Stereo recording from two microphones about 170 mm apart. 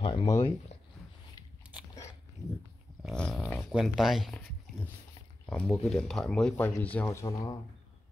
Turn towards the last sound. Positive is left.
turn(degrees=15)  # may be behind; listen again after turning